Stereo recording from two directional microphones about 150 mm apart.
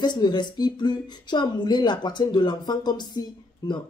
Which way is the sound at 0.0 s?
30° left (ahead or behind).